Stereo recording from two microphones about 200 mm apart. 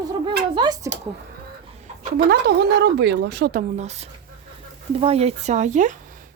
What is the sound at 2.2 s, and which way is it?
A woman's voice, 55° right (ahead or behind).